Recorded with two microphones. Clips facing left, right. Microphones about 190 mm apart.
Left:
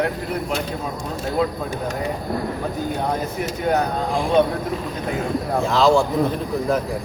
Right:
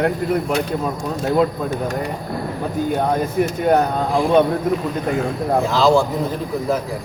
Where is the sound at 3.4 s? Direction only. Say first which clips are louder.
Right 7 dB; 50° right (ahead or behind).